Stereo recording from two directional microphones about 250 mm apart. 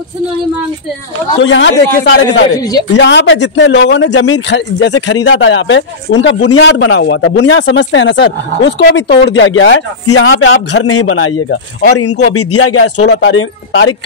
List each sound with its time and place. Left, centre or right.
1.4 s speech: left
13.0 s speech: left